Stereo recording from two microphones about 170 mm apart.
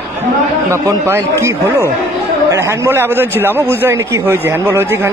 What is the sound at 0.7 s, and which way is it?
A man's voice, 15° right (ahead or behind).